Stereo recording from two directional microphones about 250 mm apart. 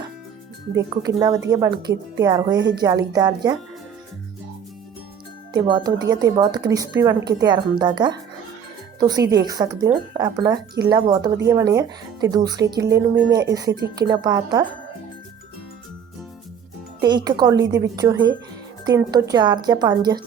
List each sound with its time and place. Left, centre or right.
0.8 s speech: centre
5.5 s speech: centre
17.0 s speech: centre